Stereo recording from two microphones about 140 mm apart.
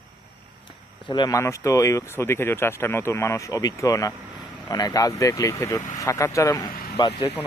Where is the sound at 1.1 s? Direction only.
30° left (ahead or behind).